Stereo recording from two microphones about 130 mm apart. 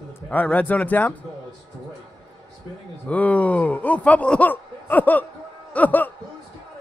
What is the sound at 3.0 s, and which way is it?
Speech, 10° left (ahead or behind).